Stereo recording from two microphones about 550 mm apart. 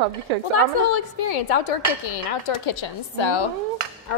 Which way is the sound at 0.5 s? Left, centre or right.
Left.